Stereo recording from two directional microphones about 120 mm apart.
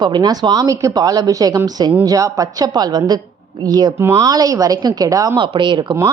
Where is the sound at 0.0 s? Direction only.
35° right (ahead or behind).